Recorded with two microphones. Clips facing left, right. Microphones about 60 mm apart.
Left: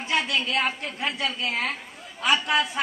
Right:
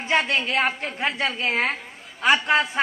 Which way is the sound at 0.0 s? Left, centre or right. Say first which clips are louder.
Right 3 dB; right.